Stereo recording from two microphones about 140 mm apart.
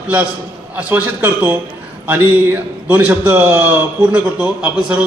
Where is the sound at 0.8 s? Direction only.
10° right (ahead or behind).